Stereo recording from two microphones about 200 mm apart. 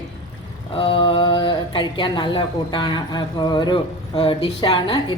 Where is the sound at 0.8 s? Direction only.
25° left (ahead or behind).